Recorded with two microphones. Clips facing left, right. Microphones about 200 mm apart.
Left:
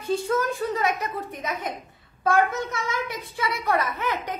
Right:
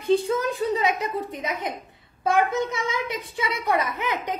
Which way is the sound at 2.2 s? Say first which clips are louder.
Right 1 dB; 15° right (ahead or behind).